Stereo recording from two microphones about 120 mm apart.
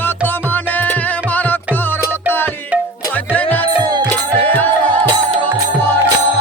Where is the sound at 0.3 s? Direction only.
15° left (ahead or behind).